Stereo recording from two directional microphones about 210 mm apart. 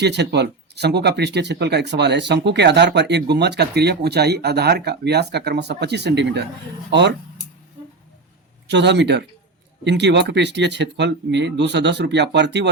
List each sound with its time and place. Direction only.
0.0 s speech: 55° right (ahead or behind)
8.6 s speech: 55° right (ahead or behind)